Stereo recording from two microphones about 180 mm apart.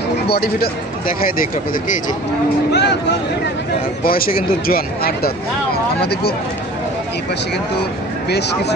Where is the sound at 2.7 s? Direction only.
70° left (ahead or behind).